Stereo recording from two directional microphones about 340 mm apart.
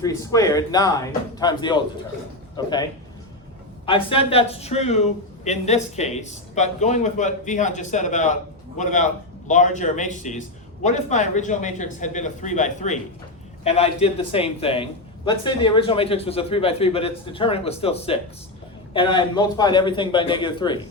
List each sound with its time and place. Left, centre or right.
0.0 s a man's voice: centre
3.8 s a man's voice: centre